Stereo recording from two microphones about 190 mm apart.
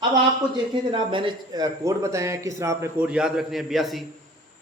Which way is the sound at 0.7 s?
25° right (ahead or behind).